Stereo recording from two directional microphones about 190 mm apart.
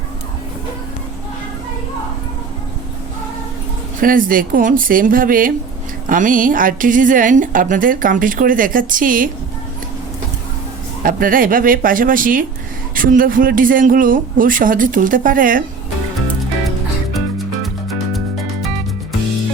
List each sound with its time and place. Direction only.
4.0 s a woman's voice: 45° right (ahead or behind)
11.0 s a woman's voice: 50° right (ahead or behind)
17.2 s music: centre (ahead or behind)